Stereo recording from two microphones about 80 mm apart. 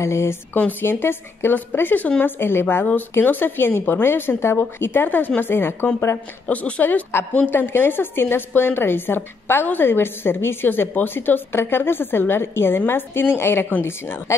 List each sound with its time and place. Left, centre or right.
0.0 s speech: left
0.6 s a woman's voice: left